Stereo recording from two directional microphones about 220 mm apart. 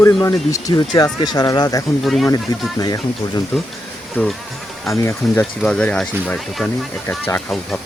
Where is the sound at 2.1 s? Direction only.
Centre (ahead or behind).